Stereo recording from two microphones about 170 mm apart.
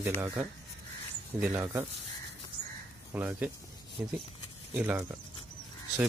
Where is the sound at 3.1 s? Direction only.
10° right (ahead or behind).